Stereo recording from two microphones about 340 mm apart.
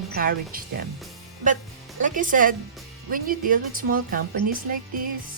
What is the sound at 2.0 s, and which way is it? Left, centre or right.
Speech, right.